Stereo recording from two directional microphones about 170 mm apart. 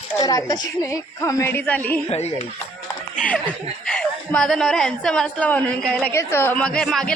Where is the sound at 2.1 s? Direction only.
40° left (ahead or behind).